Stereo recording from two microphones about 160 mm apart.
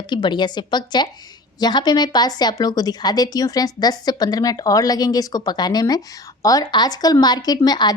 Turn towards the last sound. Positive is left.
turn(degrees=25)  # may be behind; listen again after turning